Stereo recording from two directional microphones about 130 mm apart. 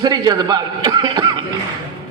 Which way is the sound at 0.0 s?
30° right (ahead or behind).